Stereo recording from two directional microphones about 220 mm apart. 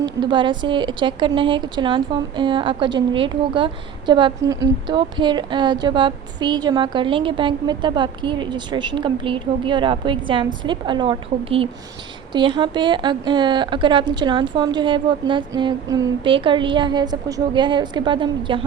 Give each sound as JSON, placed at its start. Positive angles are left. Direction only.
{"t": 0.0, "sound": "a woman's voice", "side_deg": -20}